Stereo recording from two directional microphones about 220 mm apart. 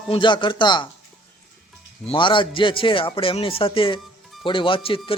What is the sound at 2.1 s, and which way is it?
A man's voice, 20° left (ahead or behind).